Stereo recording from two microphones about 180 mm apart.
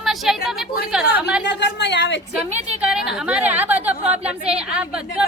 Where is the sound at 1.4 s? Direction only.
70° left (ahead or behind).